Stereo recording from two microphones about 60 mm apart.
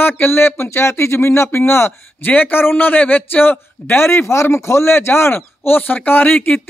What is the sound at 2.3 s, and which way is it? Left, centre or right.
A man's voice, left.